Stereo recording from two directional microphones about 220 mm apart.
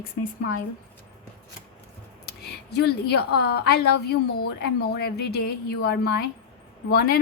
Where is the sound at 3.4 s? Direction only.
45° left (ahead or behind).